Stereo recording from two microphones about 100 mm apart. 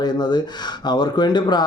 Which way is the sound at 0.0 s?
45° left (ahead or behind).